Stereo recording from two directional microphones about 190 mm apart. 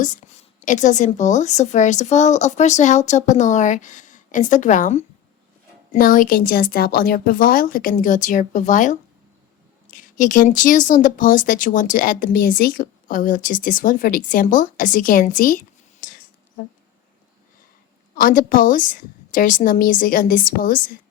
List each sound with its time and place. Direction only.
0.0 s a woman's voice: 40° left (ahead or behind)
18.2 s speech: 50° left (ahead or behind)